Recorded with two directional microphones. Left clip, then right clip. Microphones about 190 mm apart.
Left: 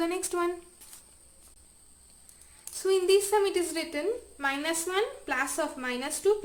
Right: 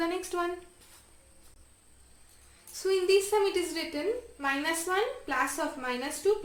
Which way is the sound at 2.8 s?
15° left (ahead or behind).